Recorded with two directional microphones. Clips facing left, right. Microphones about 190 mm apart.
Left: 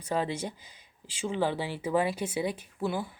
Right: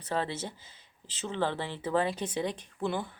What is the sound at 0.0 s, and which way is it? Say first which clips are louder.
Speech: left 2 dB; 15° left (ahead or behind).